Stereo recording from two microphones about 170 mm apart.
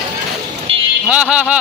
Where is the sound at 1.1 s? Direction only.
5° right (ahead or behind).